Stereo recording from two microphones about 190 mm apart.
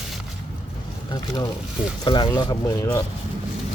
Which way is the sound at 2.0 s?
25° left (ahead or behind).